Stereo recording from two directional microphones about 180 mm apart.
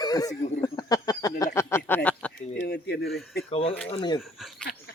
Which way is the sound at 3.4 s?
35° left (ahead or behind).